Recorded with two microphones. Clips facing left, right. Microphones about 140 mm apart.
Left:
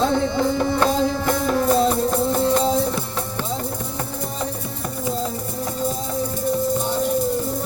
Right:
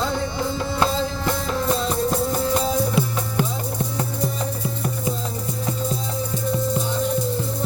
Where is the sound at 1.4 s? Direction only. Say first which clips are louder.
Left 7 dB; 50° left (ahead or behind).